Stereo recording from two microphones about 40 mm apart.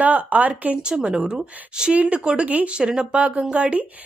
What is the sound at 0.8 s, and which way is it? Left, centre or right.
Speech, right.